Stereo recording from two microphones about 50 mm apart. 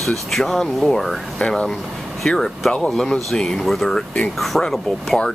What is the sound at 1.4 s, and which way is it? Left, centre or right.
Speech, centre.